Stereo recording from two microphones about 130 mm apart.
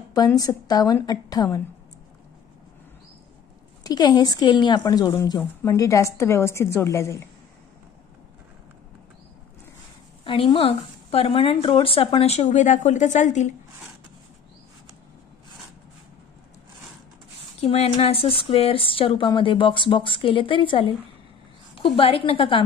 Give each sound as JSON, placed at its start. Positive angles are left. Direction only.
{"t": 0.4, "sound": "a woman's voice", "side_deg": 30}
{"t": 3.8, "sound": "a woman's voice", "side_deg": 30}
{"t": 10.2, "sound": "speech", "side_deg": 45}
{"t": 17.6, "sound": "speech", "side_deg": 50}